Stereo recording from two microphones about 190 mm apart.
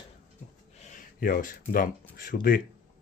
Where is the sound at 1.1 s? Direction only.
50° left (ahead or behind).